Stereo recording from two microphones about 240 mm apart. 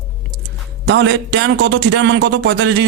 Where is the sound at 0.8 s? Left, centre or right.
Right.